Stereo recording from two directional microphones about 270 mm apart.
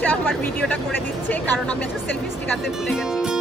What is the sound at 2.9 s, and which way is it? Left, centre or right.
Speech, centre.